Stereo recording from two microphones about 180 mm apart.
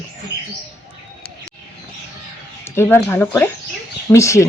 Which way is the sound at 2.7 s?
10° left (ahead or behind).